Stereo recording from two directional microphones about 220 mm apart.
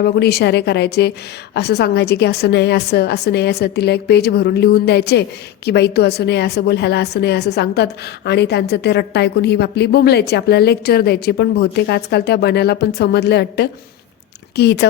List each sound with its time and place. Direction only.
0.0 s a woman's voice: 45° left (ahead or behind)